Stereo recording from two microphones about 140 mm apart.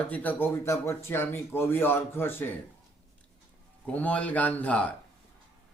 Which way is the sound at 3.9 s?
10° left (ahead or behind).